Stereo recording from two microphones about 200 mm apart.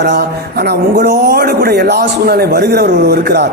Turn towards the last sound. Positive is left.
turn(degrees=-55)  # may be behind; listen again after turning